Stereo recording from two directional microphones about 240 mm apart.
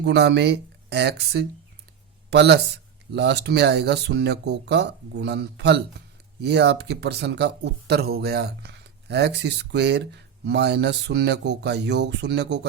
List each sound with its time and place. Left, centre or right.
0.0 s speech: right